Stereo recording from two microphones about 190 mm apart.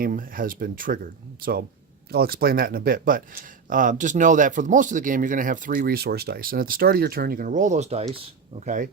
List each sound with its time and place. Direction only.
0.0 s speech: 45° right (ahead or behind)
2.0 s speech: 55° right (ahead or behind)